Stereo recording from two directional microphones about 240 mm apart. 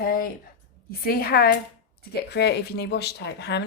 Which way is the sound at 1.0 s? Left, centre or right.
Left.